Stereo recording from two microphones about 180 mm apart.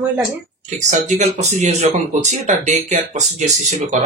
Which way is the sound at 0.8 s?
40° right (ahead or behind).